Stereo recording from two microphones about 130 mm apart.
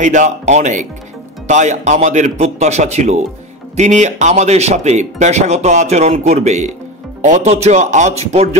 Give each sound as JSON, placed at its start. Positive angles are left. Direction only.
{"t": 0.0, "sound": "speech", "side_deg": -70}